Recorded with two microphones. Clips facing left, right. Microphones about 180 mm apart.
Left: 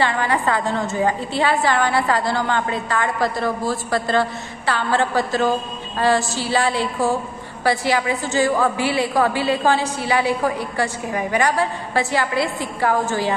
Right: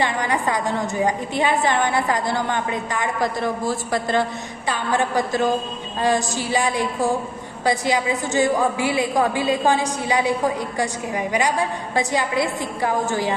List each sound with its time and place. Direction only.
0.0 s a woman's voice: 15° right (ahead or behind)